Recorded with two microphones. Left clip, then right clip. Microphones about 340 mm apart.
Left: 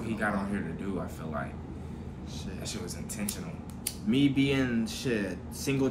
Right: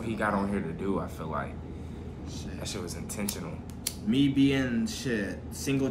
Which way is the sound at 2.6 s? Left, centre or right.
Centre.